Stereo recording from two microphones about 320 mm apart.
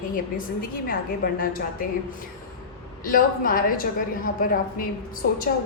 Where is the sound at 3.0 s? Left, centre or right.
Left.